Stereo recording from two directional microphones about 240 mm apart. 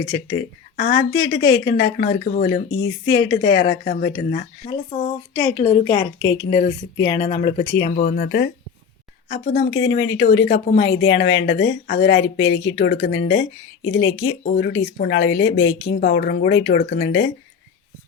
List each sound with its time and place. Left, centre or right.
0.8 s speech: left
4.6 s a woman's voice: left
7.8 s speech: left